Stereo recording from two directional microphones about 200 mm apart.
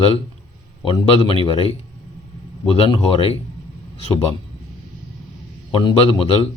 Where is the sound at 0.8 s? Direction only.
25° left (ahead or behind).